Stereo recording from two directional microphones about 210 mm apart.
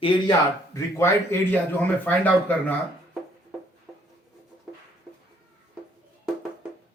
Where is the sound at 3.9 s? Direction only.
5° right (ahead or behind).